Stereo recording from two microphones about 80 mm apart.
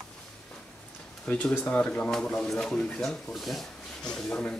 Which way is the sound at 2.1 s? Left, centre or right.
Centre.